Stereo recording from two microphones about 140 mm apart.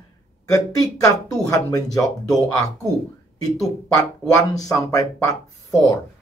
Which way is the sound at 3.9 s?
25° left (ahead or behind).